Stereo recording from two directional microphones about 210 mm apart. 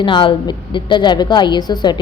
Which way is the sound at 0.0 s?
25° left (ahead or behind).